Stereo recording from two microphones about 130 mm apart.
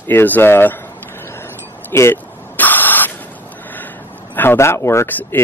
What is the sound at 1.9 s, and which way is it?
Vehicle, 15° left (ahead or behind).